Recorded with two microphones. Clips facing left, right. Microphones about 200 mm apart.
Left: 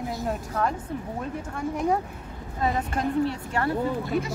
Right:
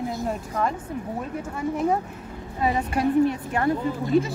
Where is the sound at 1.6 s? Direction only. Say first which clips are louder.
Right 2 dB; centre (ahead or behind).